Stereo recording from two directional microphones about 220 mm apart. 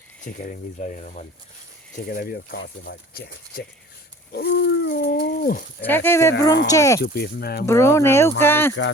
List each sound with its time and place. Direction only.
0.3 s speech: 35° left (ahead or behind)
2.0 s dog: 45° left (ahead or behind)
5.8 s speech: 10° left (ahead or behind)
7.0 s dog: 45° left (ahead or behind)
7.7 s speech: 10° left (ahead or behind)